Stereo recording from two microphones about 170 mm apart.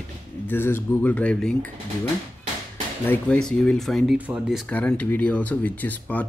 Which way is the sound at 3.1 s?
5° left (ahead or behind).